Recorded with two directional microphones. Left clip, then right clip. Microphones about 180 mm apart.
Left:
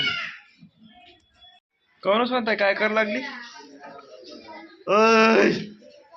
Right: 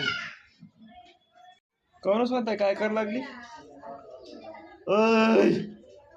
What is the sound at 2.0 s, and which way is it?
A man's voice, centre (ahead or behind).